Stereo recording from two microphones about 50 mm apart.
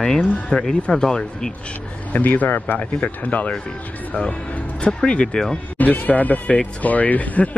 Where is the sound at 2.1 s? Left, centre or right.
Left.